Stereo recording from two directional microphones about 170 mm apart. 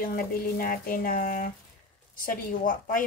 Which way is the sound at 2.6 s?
55° left (ahead or behind).